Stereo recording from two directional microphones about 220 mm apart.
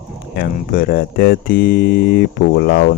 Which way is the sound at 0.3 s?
40° left (ahead or behind).